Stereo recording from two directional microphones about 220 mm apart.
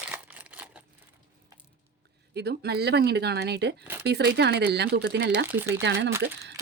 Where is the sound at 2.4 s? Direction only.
50° right (ahead or behind).